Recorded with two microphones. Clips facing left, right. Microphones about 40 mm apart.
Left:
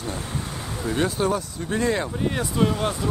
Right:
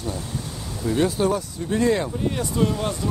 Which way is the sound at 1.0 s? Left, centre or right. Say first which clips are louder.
Right 2 dB; centre.